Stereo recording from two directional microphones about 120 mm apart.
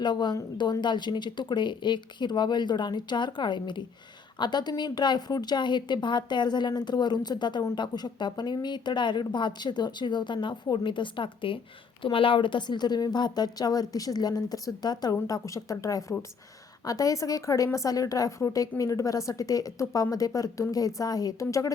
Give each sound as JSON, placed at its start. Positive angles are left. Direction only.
{"t": 0.0, "sound": "a woman's voice", "side_deg": 40}